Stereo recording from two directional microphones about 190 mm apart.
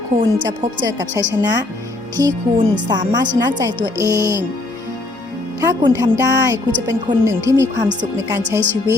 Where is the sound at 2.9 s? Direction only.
20° right (ahead or behind).